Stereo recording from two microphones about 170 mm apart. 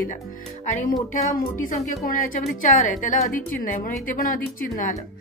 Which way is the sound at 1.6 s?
55° left (ahead or behind).